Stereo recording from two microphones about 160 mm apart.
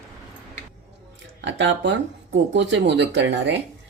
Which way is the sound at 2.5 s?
90° right.